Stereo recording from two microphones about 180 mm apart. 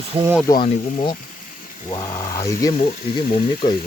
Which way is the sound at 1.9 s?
25° left (ahead or behind).